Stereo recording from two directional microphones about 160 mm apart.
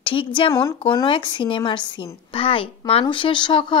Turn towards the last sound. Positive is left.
turn(degrees=30)  # may be behind; listen again after turning